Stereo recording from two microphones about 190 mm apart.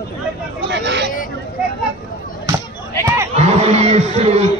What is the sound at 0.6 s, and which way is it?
Speech, 65° right (ahead or behind).